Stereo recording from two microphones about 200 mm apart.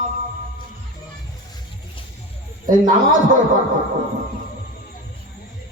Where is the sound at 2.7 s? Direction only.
40° right (ahead or behind).